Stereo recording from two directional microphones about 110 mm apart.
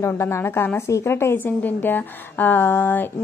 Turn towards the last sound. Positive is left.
turn(degrees=20)  # may be behind; listen again after turning